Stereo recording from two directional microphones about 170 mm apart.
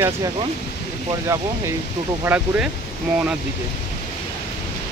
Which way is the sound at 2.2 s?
10° right (ahead or behind).